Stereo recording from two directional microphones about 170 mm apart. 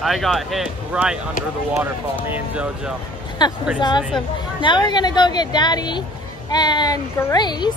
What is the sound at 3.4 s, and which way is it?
A woman's voice, 25° left (ahead or behind).